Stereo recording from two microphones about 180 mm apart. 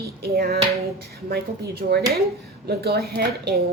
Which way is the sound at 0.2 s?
60° right (ahead or behind).